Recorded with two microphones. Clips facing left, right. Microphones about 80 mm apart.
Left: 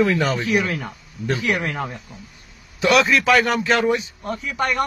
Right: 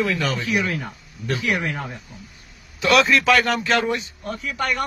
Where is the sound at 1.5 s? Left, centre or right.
Left.